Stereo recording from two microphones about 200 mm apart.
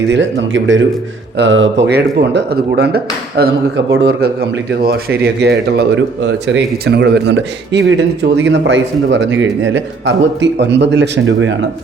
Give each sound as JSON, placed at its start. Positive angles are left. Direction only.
{"t": 0.1, "sound": "a man's voice", "side_deg": -65}